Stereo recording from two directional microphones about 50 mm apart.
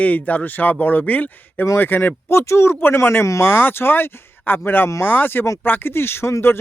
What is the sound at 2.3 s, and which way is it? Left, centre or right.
Speech, left.